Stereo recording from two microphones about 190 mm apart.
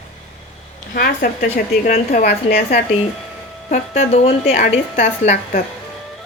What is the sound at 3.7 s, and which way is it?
A woman's voice, 35° left (ahead or behind).